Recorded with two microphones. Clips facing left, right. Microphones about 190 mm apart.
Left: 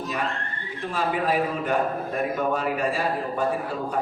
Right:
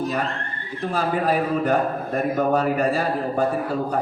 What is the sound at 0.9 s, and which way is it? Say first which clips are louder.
A man's voice: right 3 dB; 40° right (ahead or behind).